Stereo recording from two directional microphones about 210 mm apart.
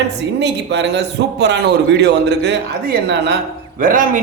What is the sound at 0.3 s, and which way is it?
A man's voice, 55° right (ahead or behind).